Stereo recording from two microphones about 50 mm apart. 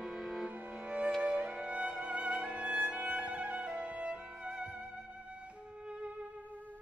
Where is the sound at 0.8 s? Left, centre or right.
Right.